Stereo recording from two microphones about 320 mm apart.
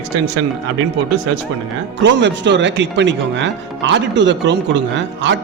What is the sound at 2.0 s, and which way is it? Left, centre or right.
Speech, right.